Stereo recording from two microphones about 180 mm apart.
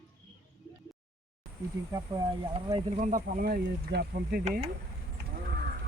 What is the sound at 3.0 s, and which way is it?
Speech, 45° right (ahead or behind).